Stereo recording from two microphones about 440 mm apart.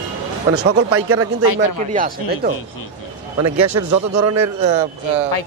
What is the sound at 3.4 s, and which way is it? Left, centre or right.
A man's voice, right.